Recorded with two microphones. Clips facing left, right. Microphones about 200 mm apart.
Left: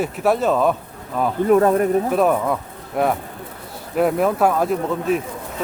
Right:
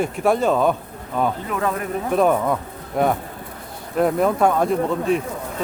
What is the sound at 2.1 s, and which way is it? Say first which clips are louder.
Speech: even; centre (ahead or behind).